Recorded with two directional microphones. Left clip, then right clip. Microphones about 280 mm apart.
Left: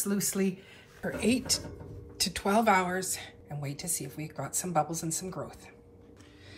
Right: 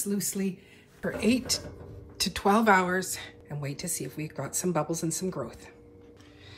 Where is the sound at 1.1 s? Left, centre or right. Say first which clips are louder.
Right 1 dB; centre.